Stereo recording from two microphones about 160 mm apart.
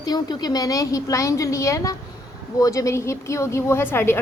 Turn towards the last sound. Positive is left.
turn(degrees=15)  # may be behind; listen again after turning